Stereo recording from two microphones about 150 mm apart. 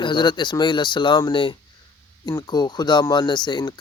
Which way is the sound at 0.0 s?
30° left (ahead or behind).